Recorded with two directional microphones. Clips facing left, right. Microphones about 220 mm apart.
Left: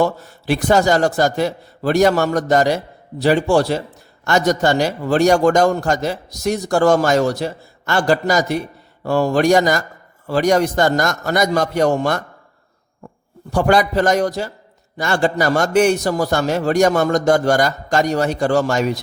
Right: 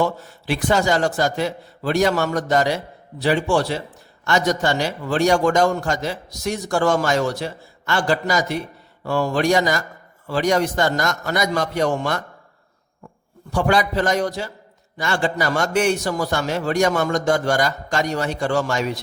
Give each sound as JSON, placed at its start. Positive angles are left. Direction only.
{"t": 0.0, "sound": "a man's voice", "side_deg": 40}
{"t": 13.5, "sound": "a man's voice", "side_deg": 40}